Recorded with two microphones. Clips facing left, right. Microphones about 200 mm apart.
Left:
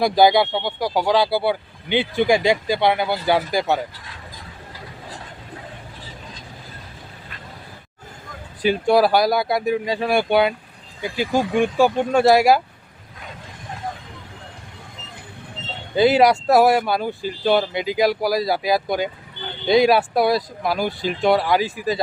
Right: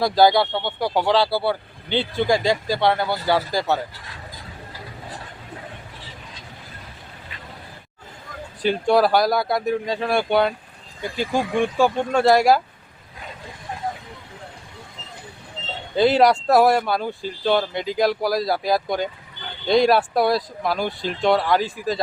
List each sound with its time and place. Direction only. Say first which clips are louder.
0.0 s speech: left 1 dB; 20° left (ahead or behind)
8.6 s speech: left 1 dB; 5° left (ahead or behind)
16.0 s speech: left 1 dB; 5° left (ahead or behind)